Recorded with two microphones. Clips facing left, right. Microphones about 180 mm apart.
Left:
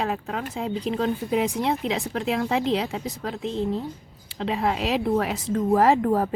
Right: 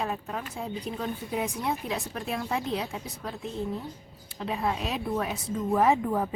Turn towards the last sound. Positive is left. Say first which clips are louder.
# left 5 dB
turn(degrees=75)  # may be behind; listen again after turning